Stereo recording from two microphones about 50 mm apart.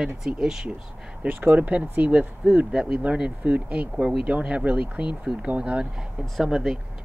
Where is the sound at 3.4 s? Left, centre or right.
Right.